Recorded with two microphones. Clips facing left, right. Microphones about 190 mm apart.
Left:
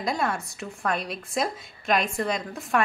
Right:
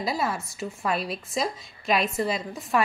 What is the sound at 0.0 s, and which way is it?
Speech, 5° right (ahead or behind).